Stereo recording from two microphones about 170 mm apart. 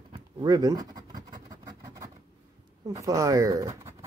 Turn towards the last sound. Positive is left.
turn(degrees=-20)  # may be behind; listen again after turning